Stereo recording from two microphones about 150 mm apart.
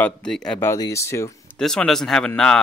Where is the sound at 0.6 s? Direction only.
20° left (ahead or behind).